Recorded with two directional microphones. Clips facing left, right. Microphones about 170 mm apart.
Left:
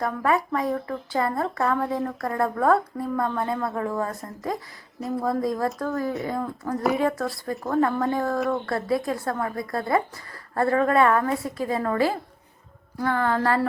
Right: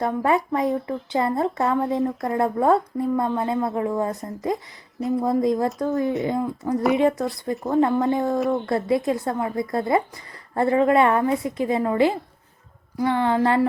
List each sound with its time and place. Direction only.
0.0 s a woman's voice: 25° right (ahead or behind)
4.5 s speech: centre (ahead or behind)
5.2 s a woman's voice: 20° right (ahead or behind)